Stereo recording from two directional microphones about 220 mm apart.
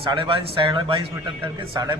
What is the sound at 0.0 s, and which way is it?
A man's voice, 25° right (ahead or behind).